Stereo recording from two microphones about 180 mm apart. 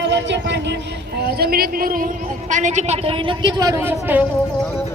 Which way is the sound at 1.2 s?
60° right (ahead or behind).